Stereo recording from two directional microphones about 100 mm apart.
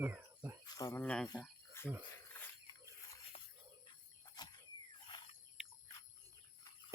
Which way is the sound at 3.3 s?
55° left (ahead or behind).